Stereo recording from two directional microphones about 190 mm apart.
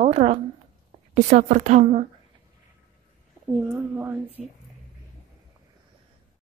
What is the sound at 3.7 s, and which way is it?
Speech, 10° right (ahead or behind).